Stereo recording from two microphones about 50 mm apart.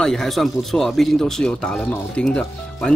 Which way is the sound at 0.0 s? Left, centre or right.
Centre.